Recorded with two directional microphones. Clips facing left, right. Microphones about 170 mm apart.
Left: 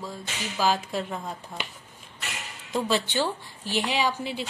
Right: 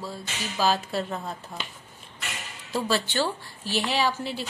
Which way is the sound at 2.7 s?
20° left (ahead or behind).